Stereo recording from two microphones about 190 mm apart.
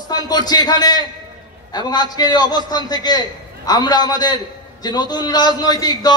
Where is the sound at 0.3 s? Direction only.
20° left (ahead or behind).